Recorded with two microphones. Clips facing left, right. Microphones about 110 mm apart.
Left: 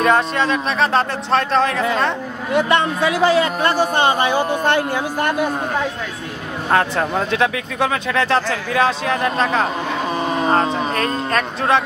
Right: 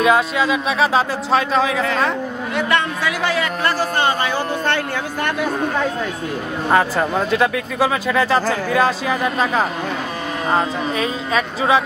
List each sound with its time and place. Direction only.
0.0 s speech: 5° right (ahead or behind)
2.5 s a man's voice: 25° left (ahead or behind)
6.7 s speech: centre (ahead or behind)